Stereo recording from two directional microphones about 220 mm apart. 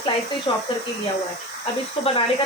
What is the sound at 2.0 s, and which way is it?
Speech, 25° left (ahead or behind).